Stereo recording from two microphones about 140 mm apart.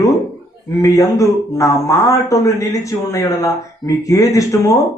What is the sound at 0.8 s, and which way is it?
A man's voice, 20° left (ahead or behind).